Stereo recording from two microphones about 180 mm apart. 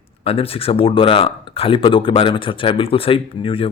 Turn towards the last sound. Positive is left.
turn(degrees=30)  # may be behind; listen again after turning